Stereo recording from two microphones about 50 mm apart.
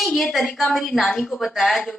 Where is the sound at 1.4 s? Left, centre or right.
Centre.